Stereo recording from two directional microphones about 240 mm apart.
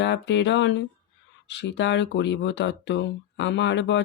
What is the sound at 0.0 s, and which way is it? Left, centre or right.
Speech, left.